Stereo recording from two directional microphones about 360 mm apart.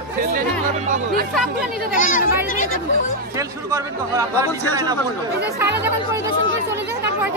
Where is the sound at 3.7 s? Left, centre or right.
Centre.